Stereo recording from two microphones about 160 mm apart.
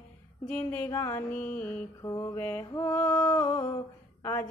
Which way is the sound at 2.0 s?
20° left (ahead or behind).